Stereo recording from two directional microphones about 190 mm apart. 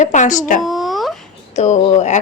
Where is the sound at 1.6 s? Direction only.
40° left (ahead or behind).